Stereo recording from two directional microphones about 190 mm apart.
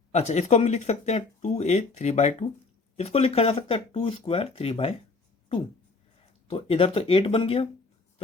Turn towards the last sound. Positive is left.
turn(degrees=30)  # may be behind; listen again after turning